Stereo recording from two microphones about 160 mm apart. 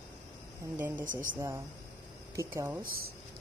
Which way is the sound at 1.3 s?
15° right (ahead or behind).